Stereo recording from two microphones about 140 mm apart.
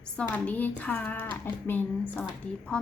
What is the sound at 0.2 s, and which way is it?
Speech, 10° left (ahead or behind).